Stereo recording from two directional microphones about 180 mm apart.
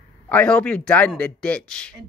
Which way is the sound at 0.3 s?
5° left (ahead or behind).